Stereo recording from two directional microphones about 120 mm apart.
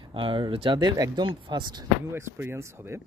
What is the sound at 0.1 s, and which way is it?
Speech, 45° right (ahead or behind).